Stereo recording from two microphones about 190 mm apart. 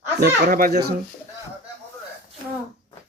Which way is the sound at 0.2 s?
55° right (ahead or behind).